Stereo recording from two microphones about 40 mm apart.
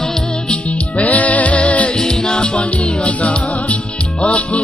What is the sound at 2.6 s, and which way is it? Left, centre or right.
Music, left.